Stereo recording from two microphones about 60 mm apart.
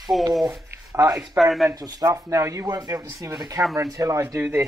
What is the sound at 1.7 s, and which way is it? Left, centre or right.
Speech, right.